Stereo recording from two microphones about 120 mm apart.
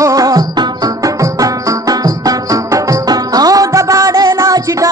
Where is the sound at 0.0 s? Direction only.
30° right (ahead or behind).